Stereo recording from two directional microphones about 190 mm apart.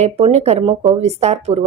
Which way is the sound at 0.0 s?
35° right (ahead or behind).